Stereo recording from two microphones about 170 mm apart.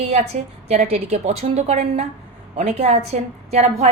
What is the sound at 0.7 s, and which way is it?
A woman's voice, 40° right (ahead or behind).